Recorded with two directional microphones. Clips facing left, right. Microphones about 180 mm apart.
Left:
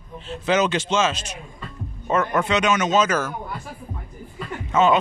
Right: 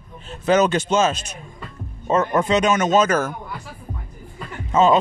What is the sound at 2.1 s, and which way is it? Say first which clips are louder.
Speech: right 3 dB; 30° right (ahead or behind).